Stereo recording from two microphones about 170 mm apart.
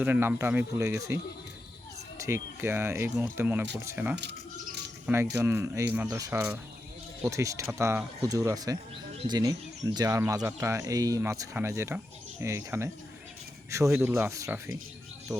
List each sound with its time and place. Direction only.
0.0 s speech: 10° right (ahead or behind)